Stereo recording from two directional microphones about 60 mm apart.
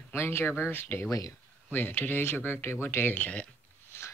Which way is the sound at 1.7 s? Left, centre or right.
Left.